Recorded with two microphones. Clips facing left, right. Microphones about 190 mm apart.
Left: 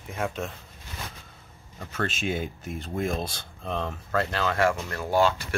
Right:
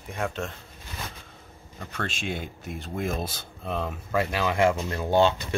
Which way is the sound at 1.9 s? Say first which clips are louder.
Left 3 dB; centre (ahead or behind).